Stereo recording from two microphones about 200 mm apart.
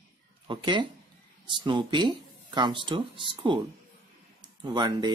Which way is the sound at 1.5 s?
25° right (ahead or behind).